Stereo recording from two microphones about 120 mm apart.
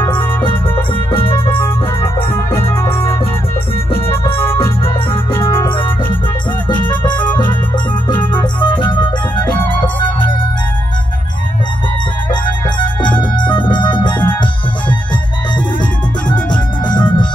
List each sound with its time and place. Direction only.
1.5 s music: 20° left (ahead or behind)
5.1 s music: 20° left (ahead or behind)
6.7 s music: 40° left (ahead or behind)
12.3 s organ: 40° left (ahead or behind)
14.0 s music: 40° left (ahead or behind)
16.8 s music: 35° left (ahead or behind)